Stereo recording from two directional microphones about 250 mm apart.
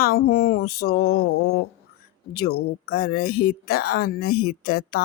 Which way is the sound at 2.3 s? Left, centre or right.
Left.